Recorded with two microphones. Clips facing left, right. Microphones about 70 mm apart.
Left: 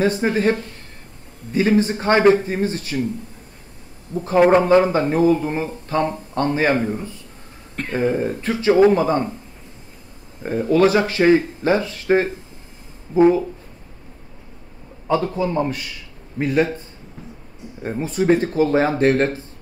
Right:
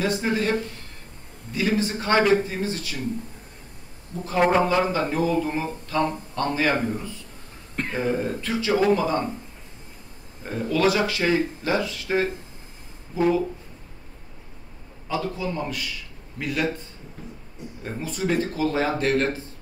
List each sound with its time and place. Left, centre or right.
0.0 s speech: left
4.6 s speech: left
7.7 s a sound: centre
8.2 s speech: left
10.4 s speech: left
15.0 s a man's voice: left
17.8 s speech: left